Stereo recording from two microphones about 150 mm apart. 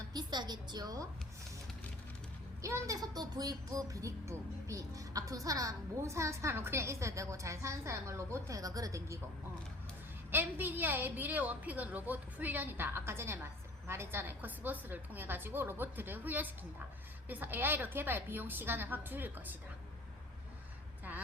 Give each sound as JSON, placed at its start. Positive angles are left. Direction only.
{"t": 0.1, "sound": "a sound", "side_deg": -30}
{"t": 2.6, "sound": "speech", "side_deg": -20}
{"t": 10.3, "sound": "a woman's voice", "side_deg": -10}